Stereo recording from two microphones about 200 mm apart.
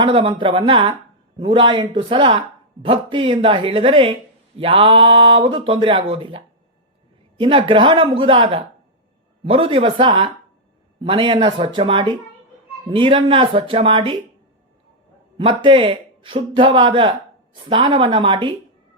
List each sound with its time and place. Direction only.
0.0 s speech: 25° right (ahead or behind)
15.4 s speech: 25° right (ahead or behind)